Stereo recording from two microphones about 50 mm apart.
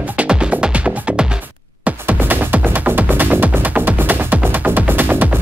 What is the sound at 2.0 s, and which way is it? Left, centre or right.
Music, right.